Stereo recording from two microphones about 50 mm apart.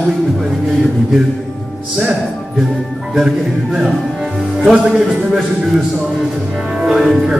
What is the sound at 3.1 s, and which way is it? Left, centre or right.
Speech, centre.